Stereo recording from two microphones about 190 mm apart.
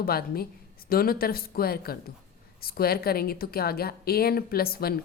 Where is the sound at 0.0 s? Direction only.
50° left (ahead or behind).